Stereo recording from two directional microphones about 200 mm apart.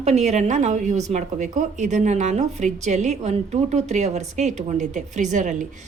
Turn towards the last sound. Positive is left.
turn(degrees=-40)  # may be behind; listen again after turning